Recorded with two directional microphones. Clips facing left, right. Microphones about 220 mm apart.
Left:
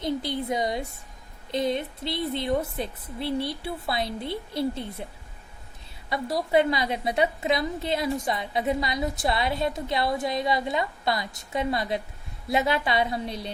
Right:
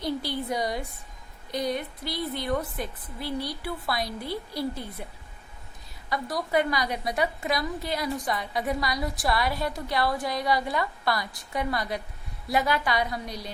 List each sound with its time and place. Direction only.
0.0 s a woman's voice: 20° left (ahead or behind)
6.1 s a woman's voice: 25° left (ahead or behind)